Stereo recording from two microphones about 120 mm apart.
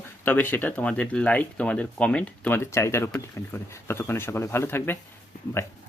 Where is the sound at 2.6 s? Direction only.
25° left (ahead or behind).